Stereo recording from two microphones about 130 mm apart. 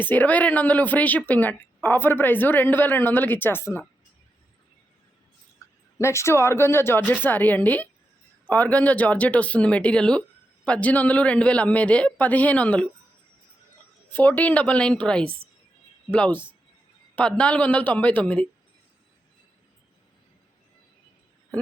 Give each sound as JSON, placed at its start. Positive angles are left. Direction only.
{"t": 0.0, "sound": "speech", "side_deg": 15}
{"t": 6.0, "sound": "speech", "side_deg": 20}
{"t": 14.1, "sound": "speech", "side_deg": 15}